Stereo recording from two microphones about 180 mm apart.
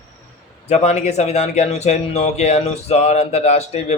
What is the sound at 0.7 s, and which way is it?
Speech, 40° left (ahead or behind).